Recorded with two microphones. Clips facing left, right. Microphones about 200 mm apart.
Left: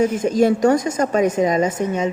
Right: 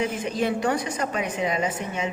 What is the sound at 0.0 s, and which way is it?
A woman's voice, 45° left (ahead or behind).